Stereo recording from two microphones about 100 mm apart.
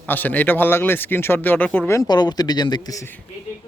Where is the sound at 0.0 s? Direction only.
20° left (ahead or behind).